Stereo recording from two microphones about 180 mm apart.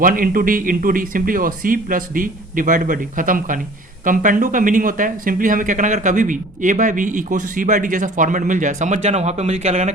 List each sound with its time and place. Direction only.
0.0 s speech: 50° right (ahead or behind)